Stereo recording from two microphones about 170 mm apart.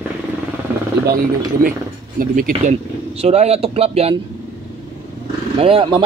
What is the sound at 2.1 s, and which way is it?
Speech, 55° right (ahead or behind).